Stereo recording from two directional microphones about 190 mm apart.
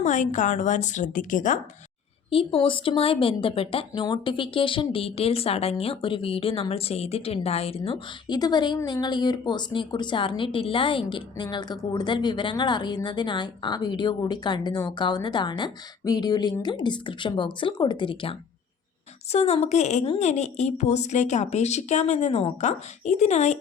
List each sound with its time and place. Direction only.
0.0 s a woman's voice: 40° left (ahead or behind)
2.3 s a woman's voice: 30° left (ahead or behind)